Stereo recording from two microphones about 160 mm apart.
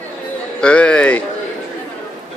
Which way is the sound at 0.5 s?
5° left (ahead or behind).